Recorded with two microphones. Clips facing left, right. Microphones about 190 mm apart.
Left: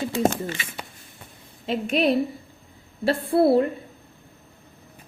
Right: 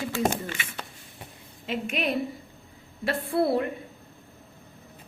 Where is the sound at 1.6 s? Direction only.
35° left (ahead or behind).